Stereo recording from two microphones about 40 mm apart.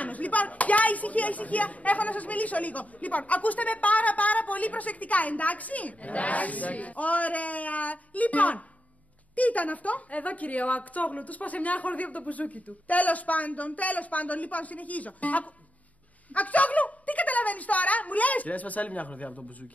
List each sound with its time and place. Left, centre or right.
0.0 s speech: left